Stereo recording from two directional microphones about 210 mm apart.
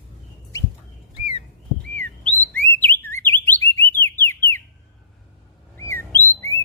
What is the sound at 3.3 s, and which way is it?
Alarm, 10° left (ahead or behind).